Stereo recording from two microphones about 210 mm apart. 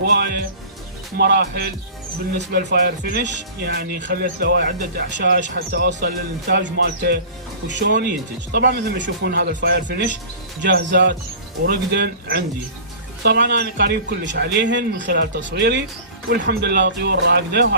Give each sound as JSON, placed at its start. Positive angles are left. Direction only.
{"t": 0.1, "sound": "speech", "side_deg": -50}
{"t": 8.5, "sound": "a man's voice", "side_deg": -45}
{"t": 16.3, "sound": "speech", "side_deg": -50}